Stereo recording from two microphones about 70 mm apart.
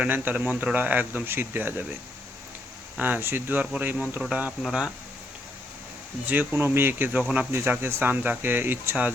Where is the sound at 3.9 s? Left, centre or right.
Centre.